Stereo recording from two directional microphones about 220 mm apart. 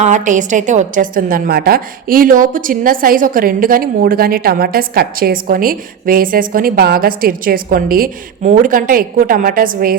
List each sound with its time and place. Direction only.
0.0 s a woman's voice: 35° right (ahead or behind)